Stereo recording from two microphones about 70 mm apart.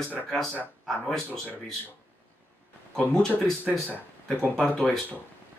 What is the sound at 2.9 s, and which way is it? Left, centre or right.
Speech, centre.